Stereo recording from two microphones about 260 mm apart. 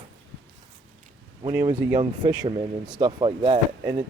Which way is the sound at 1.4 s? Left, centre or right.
Centre.